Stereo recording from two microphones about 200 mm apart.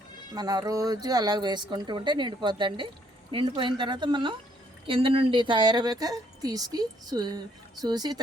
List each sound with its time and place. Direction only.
0.3 s a woman's voice: 20° right (ahead or behind)